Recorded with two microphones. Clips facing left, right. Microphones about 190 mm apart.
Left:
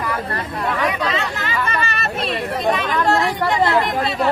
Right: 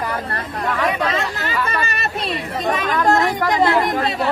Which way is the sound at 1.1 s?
40° right (ahead or behind).